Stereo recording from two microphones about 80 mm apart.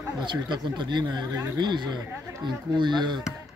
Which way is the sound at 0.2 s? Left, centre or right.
Right.